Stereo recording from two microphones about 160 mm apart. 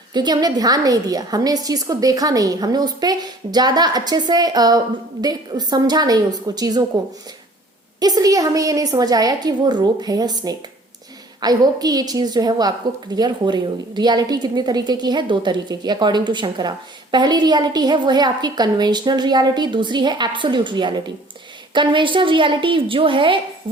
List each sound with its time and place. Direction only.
0.1 s a woman's voice: 25° right (ahead or behind)
7.9 s a woman's voice: 25° right (ahead or behind)